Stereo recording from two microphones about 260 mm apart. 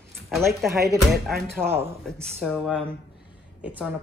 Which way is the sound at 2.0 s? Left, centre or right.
Centre.